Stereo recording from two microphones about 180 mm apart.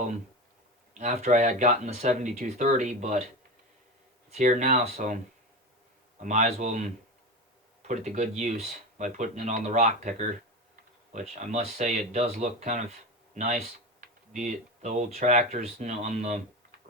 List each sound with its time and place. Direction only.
0.9 s speech: 40° right (ahead or behind)
4.3 s speech: 45° right (ahead or behind)
6.2 s speech: 45° right (ahead or behind)